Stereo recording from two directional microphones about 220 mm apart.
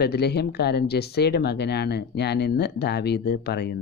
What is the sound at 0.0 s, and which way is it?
Speech, 45° left (ahead or behind).